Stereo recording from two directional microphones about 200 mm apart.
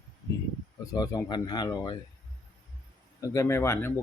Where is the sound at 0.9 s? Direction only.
20° left (ahead or behind).